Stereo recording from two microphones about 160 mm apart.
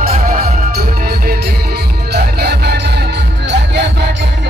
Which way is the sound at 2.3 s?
90° right.